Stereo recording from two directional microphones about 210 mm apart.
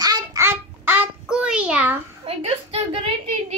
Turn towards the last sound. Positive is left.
turn(degrees=-30)  # may be behind; listen again after turning